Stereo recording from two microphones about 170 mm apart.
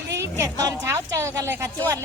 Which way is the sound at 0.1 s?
15° right (ahead or behind).